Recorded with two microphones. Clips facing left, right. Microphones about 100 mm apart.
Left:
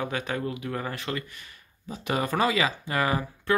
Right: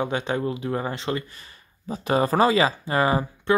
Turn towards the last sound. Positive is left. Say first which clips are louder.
# right 5 dB
turn(degrees=-30)  # may be behind; listen again after turning